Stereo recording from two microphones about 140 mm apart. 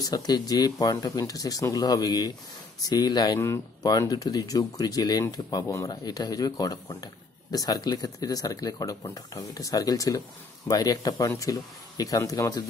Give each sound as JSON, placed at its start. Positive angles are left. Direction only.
{"t": 0.0, "sound": "speech", "side_deg": 25}